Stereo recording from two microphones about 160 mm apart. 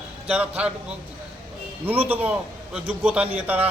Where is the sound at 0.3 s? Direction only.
5° right (ahead or behind).